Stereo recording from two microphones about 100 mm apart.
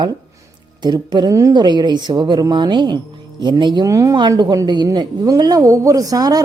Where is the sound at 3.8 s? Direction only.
35° right (ahead or behind).